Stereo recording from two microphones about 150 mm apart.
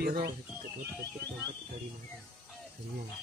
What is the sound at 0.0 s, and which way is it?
Speech, 90° right.